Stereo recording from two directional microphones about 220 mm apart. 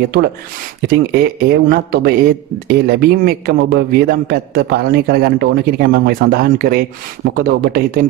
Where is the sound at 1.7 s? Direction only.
45° right (ahead or behind).